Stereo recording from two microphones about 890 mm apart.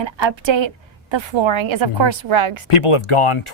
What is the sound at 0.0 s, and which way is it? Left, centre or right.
A woman's voice, right.